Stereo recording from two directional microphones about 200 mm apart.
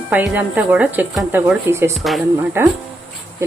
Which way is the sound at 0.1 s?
10° right (ahead or behind).